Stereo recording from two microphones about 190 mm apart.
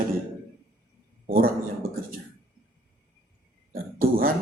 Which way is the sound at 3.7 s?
50° right (ahead or behind).